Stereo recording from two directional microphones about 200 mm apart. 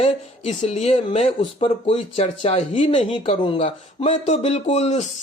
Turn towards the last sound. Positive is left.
turn(degrees=35)  # may be behind; listen again after turning